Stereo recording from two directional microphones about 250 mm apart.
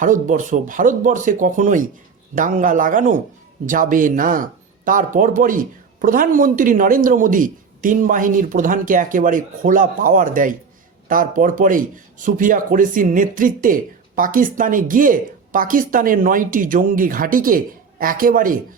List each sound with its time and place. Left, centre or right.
0.0 s speech: right